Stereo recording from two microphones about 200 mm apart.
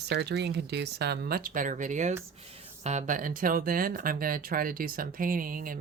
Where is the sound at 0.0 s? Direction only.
55° right (ahead or behind).